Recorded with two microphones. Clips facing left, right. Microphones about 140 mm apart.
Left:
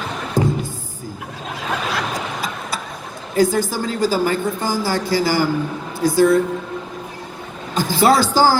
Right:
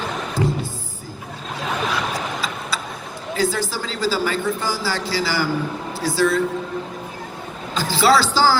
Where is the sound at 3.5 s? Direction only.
50° left (ahead or behind).